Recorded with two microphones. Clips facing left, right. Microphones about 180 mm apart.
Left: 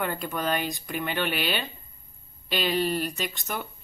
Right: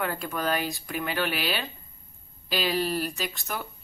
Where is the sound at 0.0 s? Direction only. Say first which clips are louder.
Even; centre (ahead or behind).